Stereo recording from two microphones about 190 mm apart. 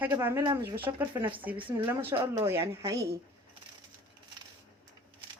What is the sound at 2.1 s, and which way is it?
Speech, 30° right (ahead or behind).